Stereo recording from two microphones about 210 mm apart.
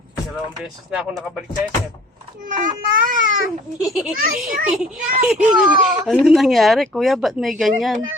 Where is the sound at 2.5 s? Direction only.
40° right (ahead or behind).